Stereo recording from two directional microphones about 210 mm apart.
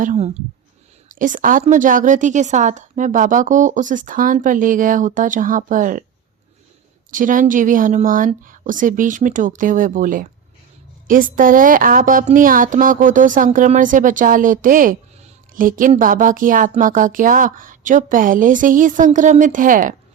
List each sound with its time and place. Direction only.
0.0 s a woman's voice: 30° right (ahead or behind)
7.1 s a woman's voice: 40° right (ahead or behind)